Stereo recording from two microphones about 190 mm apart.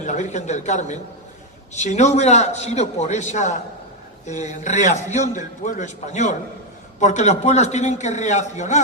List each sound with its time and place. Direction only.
0.0 s a man's voice: 40° left (ahead or behind)